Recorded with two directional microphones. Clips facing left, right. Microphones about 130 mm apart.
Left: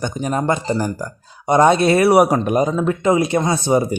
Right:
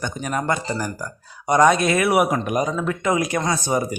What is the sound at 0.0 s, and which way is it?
Speech, 25° left (ahead or behind).